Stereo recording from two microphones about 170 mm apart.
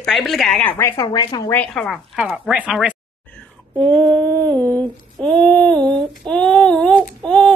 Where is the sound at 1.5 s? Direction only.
5° left (ahead or behind).